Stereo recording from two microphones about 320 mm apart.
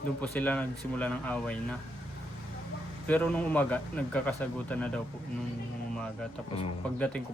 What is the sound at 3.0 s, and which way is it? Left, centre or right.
A man's voice, centre.